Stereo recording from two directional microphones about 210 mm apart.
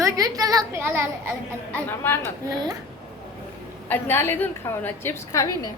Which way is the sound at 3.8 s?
10° left (ahead or behind).